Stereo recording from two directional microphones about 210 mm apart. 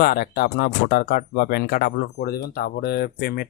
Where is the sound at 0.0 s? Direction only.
50° left (ahead or behind).